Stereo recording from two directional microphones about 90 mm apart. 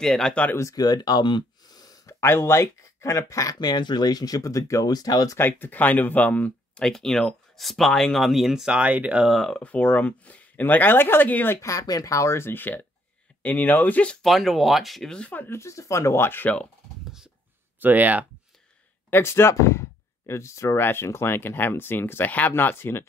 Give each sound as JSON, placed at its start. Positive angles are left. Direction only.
{"t": 0.0, "sound": "speech", "side_deg": 5}
{"t": 0.6, "sound": "speech", "side_deg": 40}
{"t": 3.5, "sound": "speech", "side_deg": 55}
{"t": 5.4, "sound": "speech", "side_deg": 20}
{"t": 9.3, "sound": "speech", "side_deg": 5}
{"t": 9.6, "sound": "speech", "side_deg": 15}
{"t": 11.6, "sound": "speech", "side_deg": 40}
{"t": 14.2, "sound": "speech", "side_deg": 0}
{"t": 17.7, "sound": "speech", "side_deg": -20}
{"t": 19.0, "sound": "speech", "side_deg": 25}